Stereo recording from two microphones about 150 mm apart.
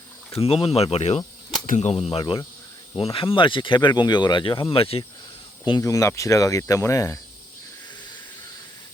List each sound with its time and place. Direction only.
0.3 s speech: 40° left (ahead or behind)
5.6 s speech: 25° left (ahead or behind)